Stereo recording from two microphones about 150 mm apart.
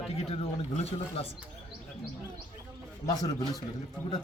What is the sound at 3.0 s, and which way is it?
Speech, 25° left (ahead or behind).